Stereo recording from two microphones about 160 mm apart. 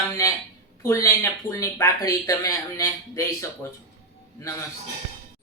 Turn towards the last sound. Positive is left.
turn(degrees=20)  # may be behind; listen again after turning